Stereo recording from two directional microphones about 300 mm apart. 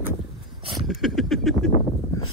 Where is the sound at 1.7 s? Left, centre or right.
Centre.